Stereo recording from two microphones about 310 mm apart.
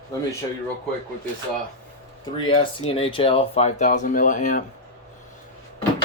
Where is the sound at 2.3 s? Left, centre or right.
Centre.